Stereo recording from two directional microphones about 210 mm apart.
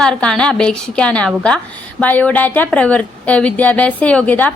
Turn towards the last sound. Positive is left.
turn(degrees=5)  # may be behind; listen again after turning